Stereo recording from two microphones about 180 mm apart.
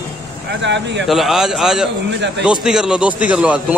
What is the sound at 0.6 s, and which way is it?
Speech, 80° right.